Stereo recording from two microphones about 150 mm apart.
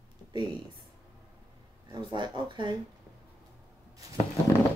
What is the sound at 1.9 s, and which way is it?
Speech, 30° right (ahead or behind).